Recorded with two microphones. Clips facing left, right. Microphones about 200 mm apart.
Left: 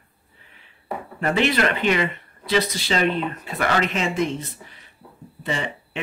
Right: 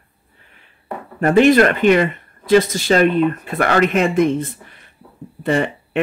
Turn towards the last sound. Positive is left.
turn(degrees=-55)  # may be behind; listen again after turning